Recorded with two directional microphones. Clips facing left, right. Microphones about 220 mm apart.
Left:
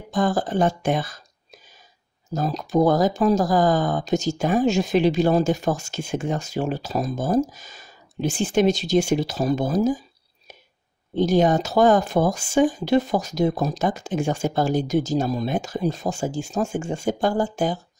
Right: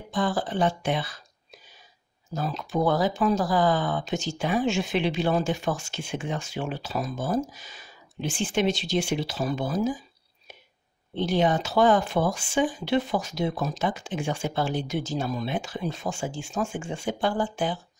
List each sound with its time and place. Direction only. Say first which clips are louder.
0.1 s speech: left 5 dB; 45° left (ahead or behind)
2.3 s speech: left 6 dB; 40° left (ahead or behind)
11.1 s speech: left 5 dB; 45° left (ahead or behind)